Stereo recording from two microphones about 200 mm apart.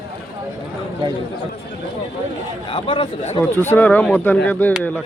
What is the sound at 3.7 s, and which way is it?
Speech, 10° left (ahead or behind).